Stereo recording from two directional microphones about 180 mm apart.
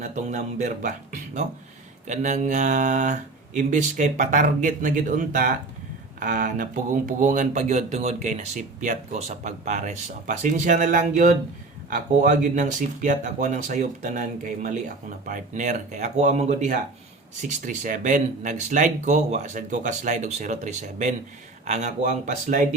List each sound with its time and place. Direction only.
0.0 s speech: 45° right (ahead or behind)